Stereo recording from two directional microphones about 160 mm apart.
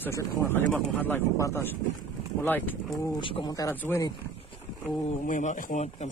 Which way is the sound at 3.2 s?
30° left (ahead or behind).